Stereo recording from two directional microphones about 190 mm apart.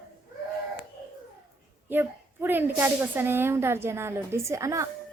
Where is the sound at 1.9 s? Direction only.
10° right (ahead or behind).